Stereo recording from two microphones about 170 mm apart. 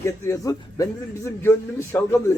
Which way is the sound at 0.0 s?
20° left (ahead or behind).